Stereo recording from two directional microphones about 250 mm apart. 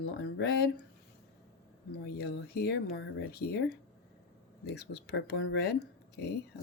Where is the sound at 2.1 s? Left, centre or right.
Left.